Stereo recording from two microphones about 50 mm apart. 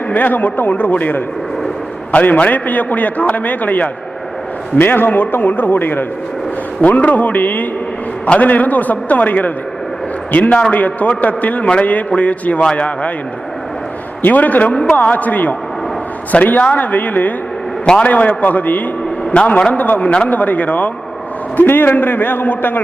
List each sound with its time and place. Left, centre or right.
0.1 s a man's voice: left
4.8 s a man's voice: left
14.2 s a man's voice: left
21.5 s a man's voice: left